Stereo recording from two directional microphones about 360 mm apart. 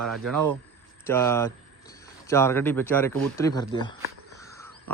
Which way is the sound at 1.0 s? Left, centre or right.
Centre.